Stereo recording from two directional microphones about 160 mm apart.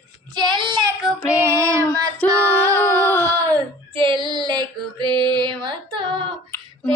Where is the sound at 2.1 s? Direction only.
10° left (ahead or behind).